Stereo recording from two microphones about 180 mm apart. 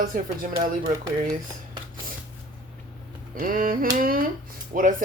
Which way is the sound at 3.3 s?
50° right (ahead or behind).